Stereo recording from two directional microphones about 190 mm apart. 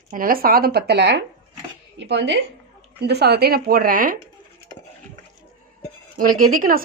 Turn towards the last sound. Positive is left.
turn(degrees=-45)  # may be behind; listen again after turning